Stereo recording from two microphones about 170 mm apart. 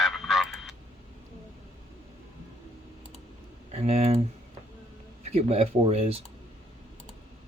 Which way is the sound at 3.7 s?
40° right (ahead or behind).